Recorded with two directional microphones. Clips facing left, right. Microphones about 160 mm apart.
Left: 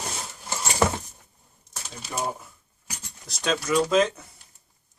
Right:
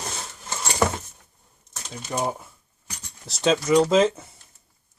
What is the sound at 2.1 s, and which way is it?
Speech, 20° right (ahead or behind).